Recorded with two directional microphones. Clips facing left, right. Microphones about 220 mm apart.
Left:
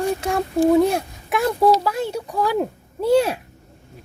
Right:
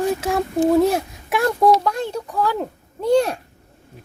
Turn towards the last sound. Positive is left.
turn(degrees=5)  # may be behind; listen again after turning